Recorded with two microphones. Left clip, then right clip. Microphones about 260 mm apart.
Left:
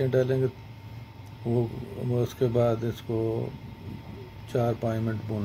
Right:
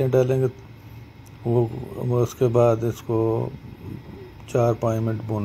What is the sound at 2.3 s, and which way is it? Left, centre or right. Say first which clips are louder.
Speech: right 6 dB; centre.